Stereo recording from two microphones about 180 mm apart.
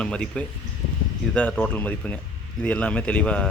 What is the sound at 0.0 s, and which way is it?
Speech, 5° left (ahead or behind).